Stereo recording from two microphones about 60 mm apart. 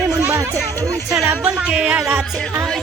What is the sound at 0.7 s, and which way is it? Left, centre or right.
Speech, right.